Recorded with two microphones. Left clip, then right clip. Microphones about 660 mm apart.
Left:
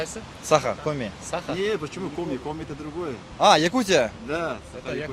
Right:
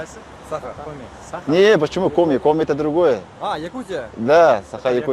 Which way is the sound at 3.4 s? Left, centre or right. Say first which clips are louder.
Left 10 dB; left.